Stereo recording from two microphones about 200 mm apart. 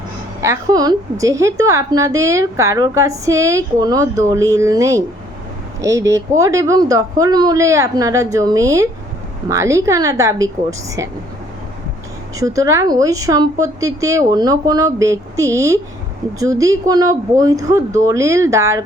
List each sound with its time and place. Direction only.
0.4 s speech: 15° right (ahead or behind)
12.4 s speech: 15° right (ahead or behind)